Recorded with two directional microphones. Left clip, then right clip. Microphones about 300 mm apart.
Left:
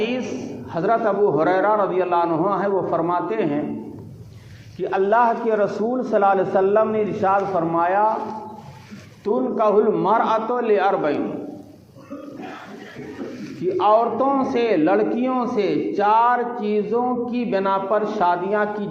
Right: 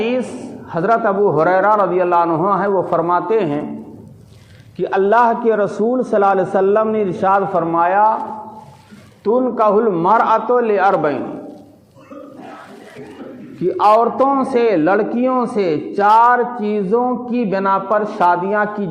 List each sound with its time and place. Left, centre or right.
0.0 s a sound: right
0.7 s a man's voice: right
4.8 s a man's voice: right
9.2 s a man's voice: right
13.7 s a man's voice: right